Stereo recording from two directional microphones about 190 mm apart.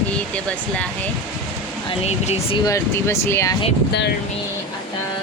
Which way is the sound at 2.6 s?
15° left (ahead or behind).